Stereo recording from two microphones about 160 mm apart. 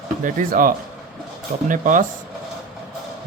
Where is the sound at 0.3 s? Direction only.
60° right (ahead or behind).